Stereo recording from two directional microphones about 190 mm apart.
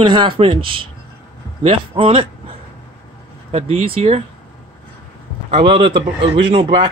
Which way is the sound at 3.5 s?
30° right (ahead or behind).